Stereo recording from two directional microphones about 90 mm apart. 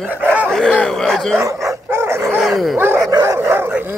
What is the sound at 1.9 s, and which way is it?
Dog, 30° right (ahead or behind).